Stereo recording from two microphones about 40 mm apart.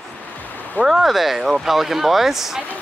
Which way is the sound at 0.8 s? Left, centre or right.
Centre.